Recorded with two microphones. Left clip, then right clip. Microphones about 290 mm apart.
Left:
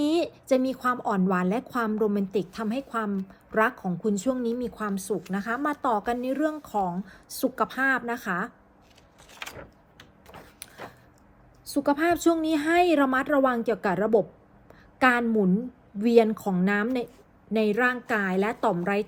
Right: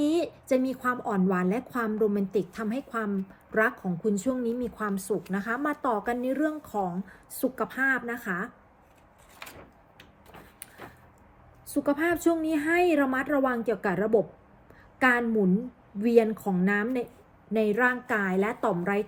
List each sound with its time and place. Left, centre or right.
0.0 s a woman's voice: centre
9.4 s drawer open or close: left
11.7 s a woman's voice: centre